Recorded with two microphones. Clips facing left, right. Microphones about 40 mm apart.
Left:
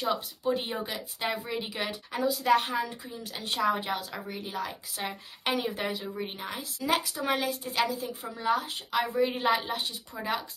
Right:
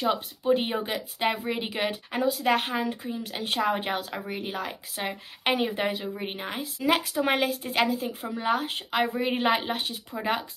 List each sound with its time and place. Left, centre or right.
0.0 s a woman's voice: right